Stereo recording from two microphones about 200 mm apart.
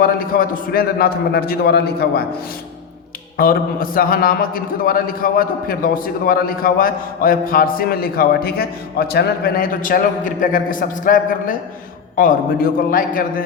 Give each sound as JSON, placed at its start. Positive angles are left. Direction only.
{"t": 0.0, "sound": "a man's voice", "side_deg": 45}
{"t": 3.3, "sound": "a man's voice", "side_deg": 45}